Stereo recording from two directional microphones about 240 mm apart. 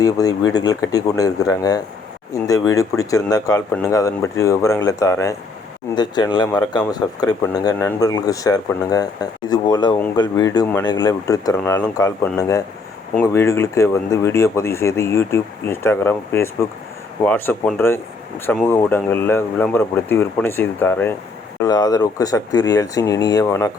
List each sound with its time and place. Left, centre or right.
0.0 s speech: centre